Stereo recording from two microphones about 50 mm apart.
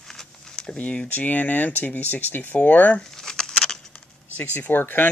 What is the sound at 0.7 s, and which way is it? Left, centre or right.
Speech, left.